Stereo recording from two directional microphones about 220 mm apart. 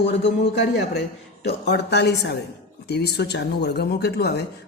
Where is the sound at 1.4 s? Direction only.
50° left (ahead or behind).